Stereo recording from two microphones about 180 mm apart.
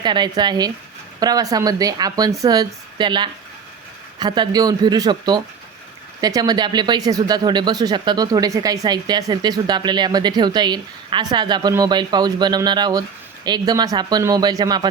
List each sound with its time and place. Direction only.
0.0 s speech: 25° right (ahead or behind)